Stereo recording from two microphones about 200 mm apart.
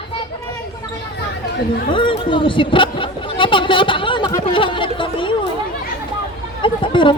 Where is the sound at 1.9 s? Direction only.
25° left (ahead or behind).